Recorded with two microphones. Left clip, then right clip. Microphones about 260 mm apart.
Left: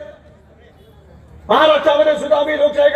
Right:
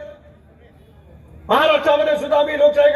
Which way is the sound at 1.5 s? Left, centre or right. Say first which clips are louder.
Left 3 dB; right.